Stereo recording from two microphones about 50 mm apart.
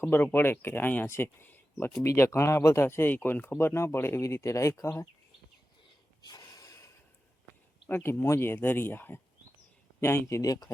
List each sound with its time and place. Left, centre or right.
0.0 s speech: left
1.0 s speech: left
1.5 s a sound: left
2.0 s speech: left
2.8 s speech: left
3.6 s speech: left
6.4 s gasp: left
7.9 s speech: left
8.5 s speech: left
10.0 s speech: left